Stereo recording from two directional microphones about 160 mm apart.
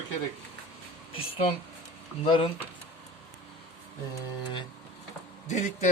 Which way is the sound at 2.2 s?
30° left (ahead or behind).